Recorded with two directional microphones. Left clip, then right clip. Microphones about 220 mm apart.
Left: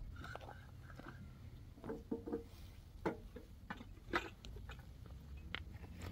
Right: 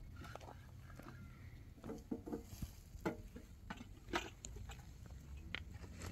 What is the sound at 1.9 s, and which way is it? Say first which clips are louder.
Rowboat: left 3 dB; 30° right (ahead or behind).